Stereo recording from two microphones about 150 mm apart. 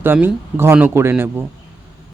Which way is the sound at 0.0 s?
15° right (ahead or behind).